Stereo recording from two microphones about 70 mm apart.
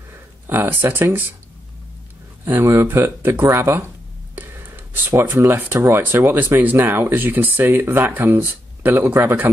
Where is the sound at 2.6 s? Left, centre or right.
Right.